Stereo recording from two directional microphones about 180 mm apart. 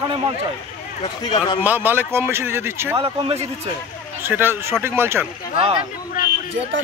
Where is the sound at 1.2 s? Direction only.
25° left (ahead or behind).